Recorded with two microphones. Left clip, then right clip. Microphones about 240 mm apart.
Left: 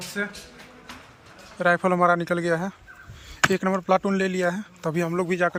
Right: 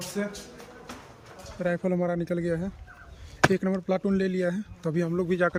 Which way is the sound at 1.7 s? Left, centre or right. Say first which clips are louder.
Left 9 dB; left.